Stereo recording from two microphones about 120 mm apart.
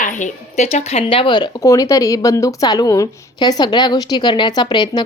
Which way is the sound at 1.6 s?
25° left (ahead or behind).